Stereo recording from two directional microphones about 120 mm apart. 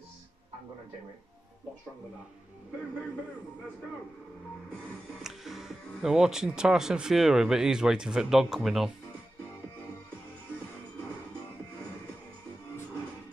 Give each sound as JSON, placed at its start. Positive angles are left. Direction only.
{"t": 5.2, "sound": "speech", "side_deg": -5}